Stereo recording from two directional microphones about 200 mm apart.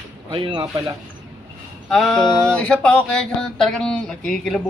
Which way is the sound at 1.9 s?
Centre (ahead or behind).